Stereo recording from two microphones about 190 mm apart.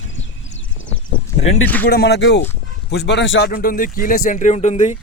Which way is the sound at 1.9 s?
60° left (ahead or behind).